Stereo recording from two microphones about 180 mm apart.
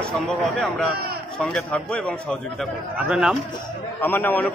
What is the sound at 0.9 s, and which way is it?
Speech, 60° right (ahead or behind).